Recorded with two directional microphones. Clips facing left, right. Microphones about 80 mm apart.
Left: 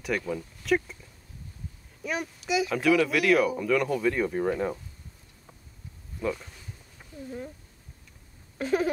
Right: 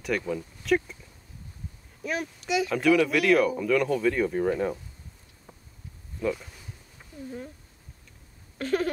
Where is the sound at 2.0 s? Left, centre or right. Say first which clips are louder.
Right 1 dB; centre.